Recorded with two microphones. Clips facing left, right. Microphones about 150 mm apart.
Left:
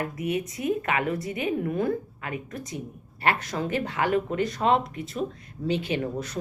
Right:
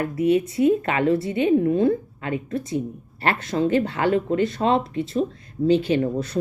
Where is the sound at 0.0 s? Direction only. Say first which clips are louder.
Right 9 dB; 30° right (ahead or behind).